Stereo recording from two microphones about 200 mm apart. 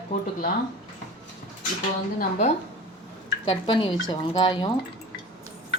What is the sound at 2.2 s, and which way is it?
Speech, 35° left (ahead or behind).